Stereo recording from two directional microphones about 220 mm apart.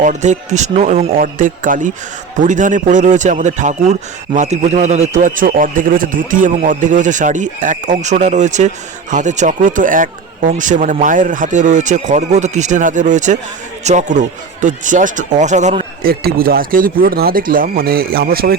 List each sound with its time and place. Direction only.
0.0 s speech: 35° right (ahead or behind)
16.0 s speech: 40° right (ahead or behind)